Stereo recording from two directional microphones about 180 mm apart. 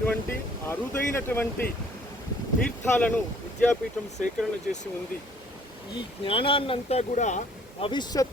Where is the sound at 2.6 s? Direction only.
10° left (ahead or behind).